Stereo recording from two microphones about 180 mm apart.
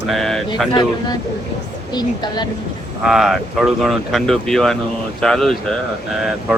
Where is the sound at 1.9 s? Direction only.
25° left (ahead or behind).